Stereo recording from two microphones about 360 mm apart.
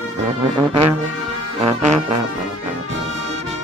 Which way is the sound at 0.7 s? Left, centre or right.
Centre.